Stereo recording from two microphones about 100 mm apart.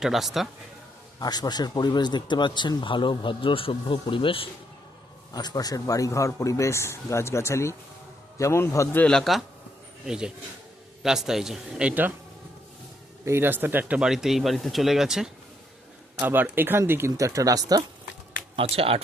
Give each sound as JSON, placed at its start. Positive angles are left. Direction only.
{"t": 0.0, "sound": "speech", "side_deg": -5}
{"t": 1.2, "sound": "speech", "side_deg": 40}
{"t": 5.3, "sound": "a man's voice", "side_deg": 40}
{"t": 9.0, "sound": "speech", "side_deg": 5}
{"t": 11.9, "sound": "speech", "side_deg": -15}
{"t": 13.2, "sound": "speech", "side_deg": -25}
{"t": 14.1, "sound": "speech", "side_deg": -5}
{"t": 16.2, "sound": "speech", "side_deg": -20}
{"t": 18.5, "sound": "speech", "side_deg": -75}